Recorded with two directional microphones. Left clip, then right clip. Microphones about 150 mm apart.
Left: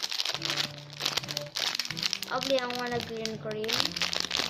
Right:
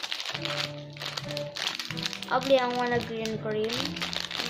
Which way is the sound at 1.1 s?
30° left (ahead or behind).